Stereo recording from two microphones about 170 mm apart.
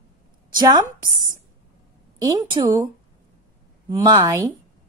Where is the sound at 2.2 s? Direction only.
25° right (ahead or behind).